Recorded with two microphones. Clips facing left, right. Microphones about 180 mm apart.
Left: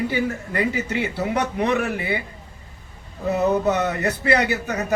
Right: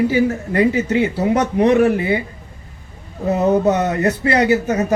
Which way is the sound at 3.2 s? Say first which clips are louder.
Right 4 dB; 40° right (ahead or behind).